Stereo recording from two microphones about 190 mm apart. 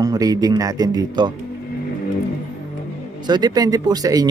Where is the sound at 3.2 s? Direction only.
20° right (ahead or behind).